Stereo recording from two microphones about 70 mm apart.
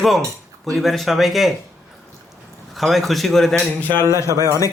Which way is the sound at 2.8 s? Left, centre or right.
Centre.